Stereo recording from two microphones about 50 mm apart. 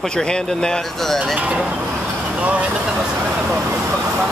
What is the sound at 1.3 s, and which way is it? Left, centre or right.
Speech, right.